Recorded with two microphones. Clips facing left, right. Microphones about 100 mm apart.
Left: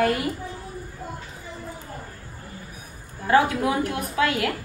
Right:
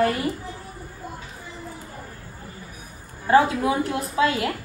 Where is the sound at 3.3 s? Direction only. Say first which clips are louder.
Right 2 dB; 30° right (ahead or behind).